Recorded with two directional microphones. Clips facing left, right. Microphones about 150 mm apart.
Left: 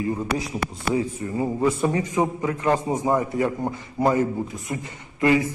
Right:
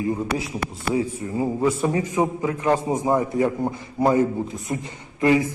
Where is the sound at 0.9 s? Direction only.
10° right (ahead or behind).